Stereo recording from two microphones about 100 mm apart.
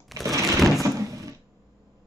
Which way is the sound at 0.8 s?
35° right (ahead or behind).